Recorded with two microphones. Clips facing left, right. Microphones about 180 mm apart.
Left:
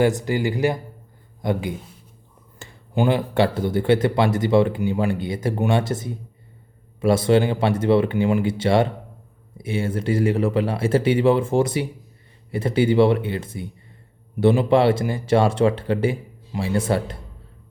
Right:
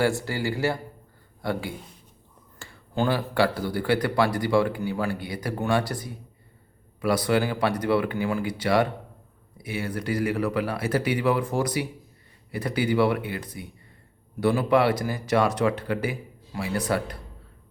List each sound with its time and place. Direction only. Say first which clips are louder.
0.0 s a man's voice: left 5 dB; 20° left (ahead or behind)